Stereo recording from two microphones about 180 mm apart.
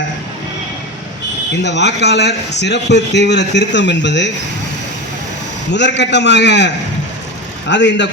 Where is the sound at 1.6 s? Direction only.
75° left (ahead or behind).